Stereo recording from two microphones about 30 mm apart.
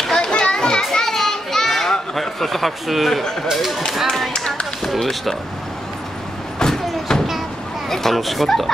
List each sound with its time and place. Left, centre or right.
0.2 s children playing: left
0.9 s children playing: centre
3.5 s speech: centre
4.8 s speech: centre
6.6 s a sound: left
7.9 s a child's voice: centre